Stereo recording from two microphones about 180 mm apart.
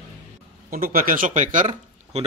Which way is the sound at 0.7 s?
55° right (ahead or behind).